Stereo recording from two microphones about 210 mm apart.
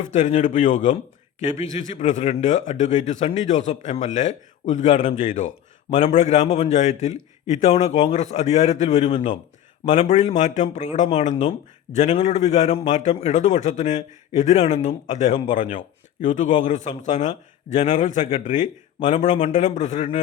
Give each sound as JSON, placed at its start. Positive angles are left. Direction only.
{"t": 0.0, "sound": "a man's voice", "side_deg": 35}